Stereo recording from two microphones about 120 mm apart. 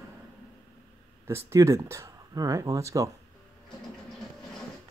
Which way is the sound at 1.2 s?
25° right (ahead or behind).